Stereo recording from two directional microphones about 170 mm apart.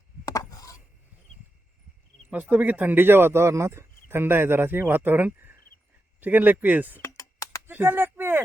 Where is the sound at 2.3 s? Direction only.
10° right (ahead or behind).